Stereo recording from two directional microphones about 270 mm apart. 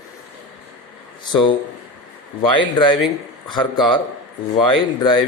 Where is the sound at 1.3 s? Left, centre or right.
Centre.